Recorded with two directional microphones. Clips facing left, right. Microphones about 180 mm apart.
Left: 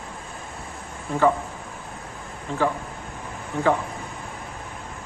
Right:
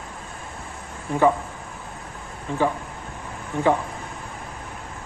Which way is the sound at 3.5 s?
15° right (ahead or behind).